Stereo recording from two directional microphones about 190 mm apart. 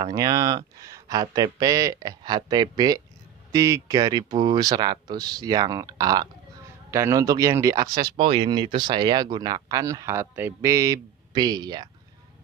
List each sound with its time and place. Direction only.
0.0 s speech: 20° right (ahead or behind)